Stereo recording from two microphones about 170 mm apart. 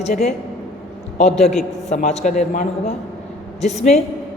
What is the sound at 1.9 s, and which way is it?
A man's voice, 40° left (ahead or behind).